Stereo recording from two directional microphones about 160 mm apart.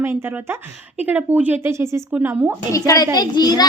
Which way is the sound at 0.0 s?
15° right (ahead or behind).